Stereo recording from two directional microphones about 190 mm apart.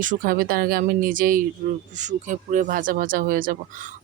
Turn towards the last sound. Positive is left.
turn(degrees=-45)  # may be behind; listen again after turning